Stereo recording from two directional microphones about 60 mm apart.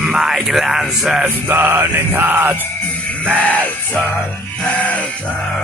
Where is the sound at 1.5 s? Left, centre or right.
Right.